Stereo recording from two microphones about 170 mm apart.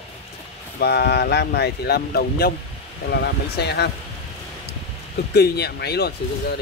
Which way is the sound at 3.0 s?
75° left (ahead or behind).